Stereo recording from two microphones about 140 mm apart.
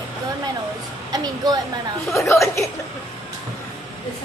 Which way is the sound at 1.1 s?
25° right (ahead or behind).